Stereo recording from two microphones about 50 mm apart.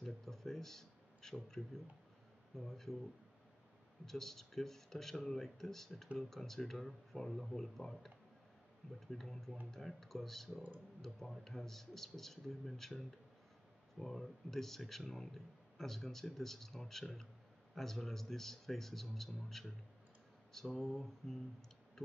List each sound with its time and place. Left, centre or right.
0.0 s a man's voice: centre
4.0 s a man's voice: centre